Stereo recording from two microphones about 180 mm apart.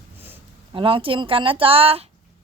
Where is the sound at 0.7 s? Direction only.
30° right (ahead or behind).